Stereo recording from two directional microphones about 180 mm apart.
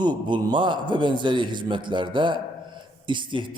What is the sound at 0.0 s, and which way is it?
A man's voice, 25° right (ahead or behind).